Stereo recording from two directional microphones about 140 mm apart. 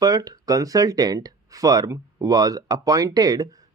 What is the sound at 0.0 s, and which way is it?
Speech, 25° right (ahead or behind).